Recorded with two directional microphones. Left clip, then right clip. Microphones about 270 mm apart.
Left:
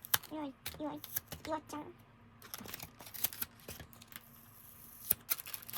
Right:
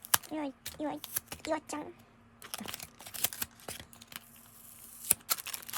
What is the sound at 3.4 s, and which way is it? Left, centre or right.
Scissors, centre.